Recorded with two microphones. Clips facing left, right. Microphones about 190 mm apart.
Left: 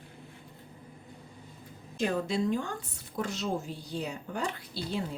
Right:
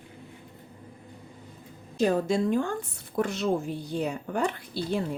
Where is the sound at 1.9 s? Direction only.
40° right (ahead or behind).